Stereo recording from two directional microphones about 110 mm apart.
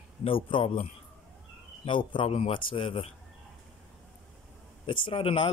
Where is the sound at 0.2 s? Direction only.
55° left (ahead or behind).